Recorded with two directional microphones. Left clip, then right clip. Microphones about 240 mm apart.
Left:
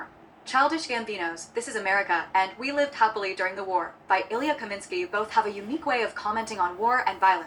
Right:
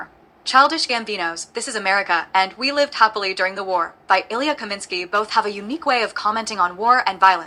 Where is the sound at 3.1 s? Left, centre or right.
Centre.